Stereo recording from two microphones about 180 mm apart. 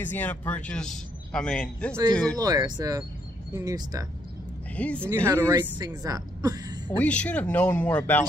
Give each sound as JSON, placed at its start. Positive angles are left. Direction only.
{"t": 0.0, "sound": "a man's voice", "side_deg": 10}
{"t": 2.3, "sound": "speech", "side_deg": -20}
{"t": 4.7, "sound": "speech", "side_deg": 5}
{"t": 5.1, "sound": "speech", "side_deg": -15}
{"t": 7.0, "sound": "speech", "side_deg": 5}